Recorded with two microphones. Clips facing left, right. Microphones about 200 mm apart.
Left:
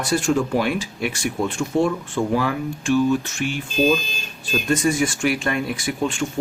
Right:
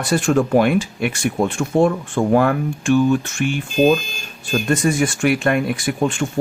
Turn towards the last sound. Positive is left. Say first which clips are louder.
# right 4 dB
turn(degrees=-55)  # may be behind; listen again after turning